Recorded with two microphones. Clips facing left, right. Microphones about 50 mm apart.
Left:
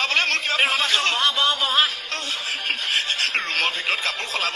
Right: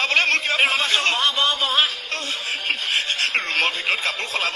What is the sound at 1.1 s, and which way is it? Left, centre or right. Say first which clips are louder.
Speech: even; centre.